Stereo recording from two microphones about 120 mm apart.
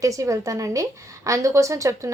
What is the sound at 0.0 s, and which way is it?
A woman's voice, 30° right (ahead or behind).